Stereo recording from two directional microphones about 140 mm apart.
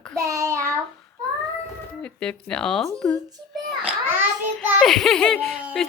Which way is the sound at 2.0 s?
5° left (ahead or behind).